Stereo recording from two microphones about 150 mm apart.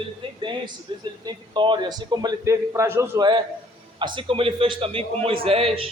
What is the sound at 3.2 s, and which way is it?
A man's voice, 30° right (ahead or behind).